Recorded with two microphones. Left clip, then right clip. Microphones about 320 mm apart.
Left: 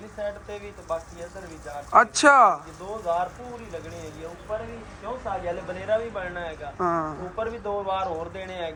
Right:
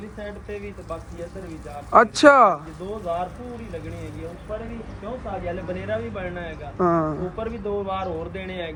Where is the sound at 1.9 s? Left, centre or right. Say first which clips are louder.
Right 3 dB; centre.